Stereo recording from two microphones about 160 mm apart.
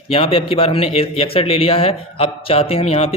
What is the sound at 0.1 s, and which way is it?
A man's voice, 35° left (ahead or behind).